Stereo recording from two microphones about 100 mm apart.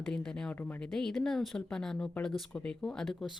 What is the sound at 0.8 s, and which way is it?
Speech, 5° left (ahead or behind).